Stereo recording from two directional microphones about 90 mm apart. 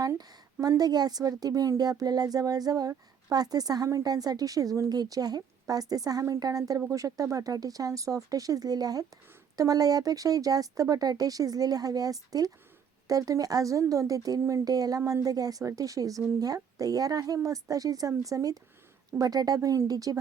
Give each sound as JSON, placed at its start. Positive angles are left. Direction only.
{"t": 0.6, "sound": "speech", "side_deg": -45}